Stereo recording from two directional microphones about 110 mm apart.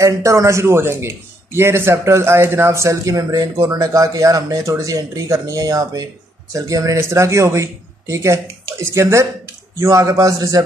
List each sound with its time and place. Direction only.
0.0 s a man's voice: 30° right (ahead or behind)